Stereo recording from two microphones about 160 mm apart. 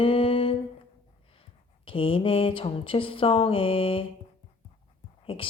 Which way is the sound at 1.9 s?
35° left (ahead or behind).